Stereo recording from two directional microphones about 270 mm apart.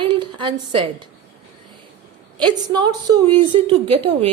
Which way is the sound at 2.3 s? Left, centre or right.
Centre.